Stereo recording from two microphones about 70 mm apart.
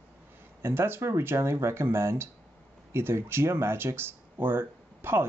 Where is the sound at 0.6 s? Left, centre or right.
Right.